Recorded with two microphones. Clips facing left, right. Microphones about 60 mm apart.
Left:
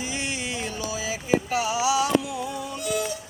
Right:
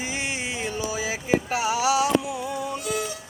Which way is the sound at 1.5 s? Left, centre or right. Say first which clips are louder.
Right 1 dB; right.